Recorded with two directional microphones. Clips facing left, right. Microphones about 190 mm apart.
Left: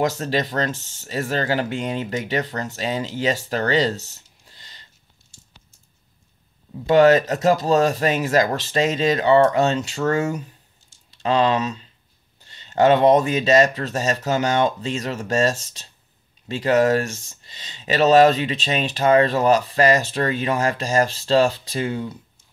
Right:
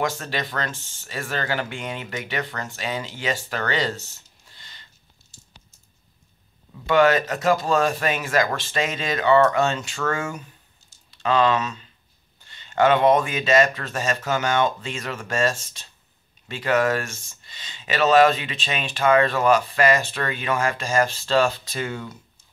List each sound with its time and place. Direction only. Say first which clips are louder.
0.0 s speech: left 5 dB; 40° left (ahead or behind)
6.9 s speech: left 4 dB; 40° left (ahead or behind)